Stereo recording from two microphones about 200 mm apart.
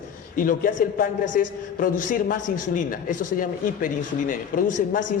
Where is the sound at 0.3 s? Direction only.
45° left (ahead or behind).